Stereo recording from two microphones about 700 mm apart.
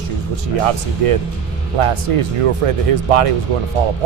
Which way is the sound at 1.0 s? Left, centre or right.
Right.